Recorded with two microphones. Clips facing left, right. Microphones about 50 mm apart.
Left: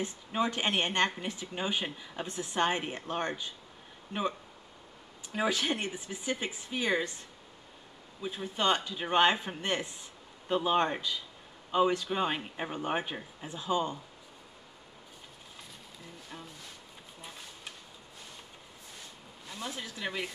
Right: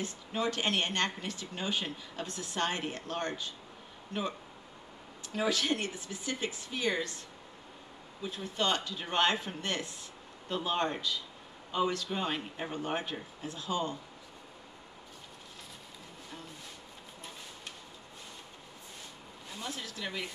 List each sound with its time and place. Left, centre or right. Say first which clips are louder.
0.0 s speech: left 2 dB; left
5.3 s speech: even; centre
8.2 s speech: left 2 dB; centre
19.6 s speech: left 2 dB; centre